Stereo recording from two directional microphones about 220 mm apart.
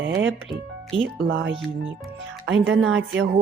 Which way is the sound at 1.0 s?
55° right (ahead or behind).